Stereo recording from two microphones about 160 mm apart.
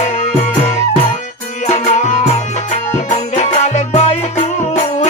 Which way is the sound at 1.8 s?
45° left (ahead or behind).